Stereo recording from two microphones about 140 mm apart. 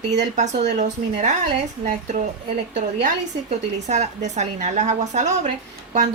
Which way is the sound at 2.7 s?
60° right (ahead or behind).